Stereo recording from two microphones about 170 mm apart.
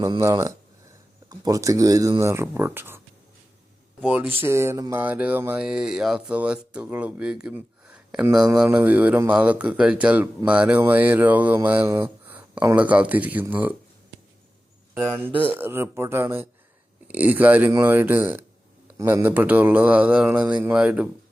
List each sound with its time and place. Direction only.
0.0 s speech: 20° right (ahead or behind)
4.0 s speech: 10° right (ahead or behind)
15.4 s speech: 10° right (ahead or behind)